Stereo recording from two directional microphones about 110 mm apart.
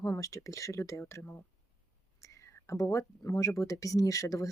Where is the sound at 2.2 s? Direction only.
25° left (ahead or behind).